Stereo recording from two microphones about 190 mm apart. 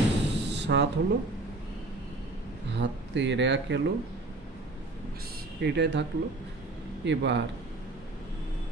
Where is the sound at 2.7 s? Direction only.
70° right (ahead or behind).